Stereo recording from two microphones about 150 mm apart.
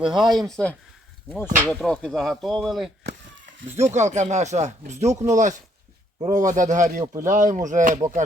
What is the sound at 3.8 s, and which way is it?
Speech, 50° right (ahead or behind).